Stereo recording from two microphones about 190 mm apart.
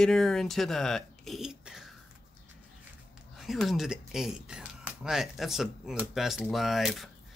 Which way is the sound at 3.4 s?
Centre (ahead or behind).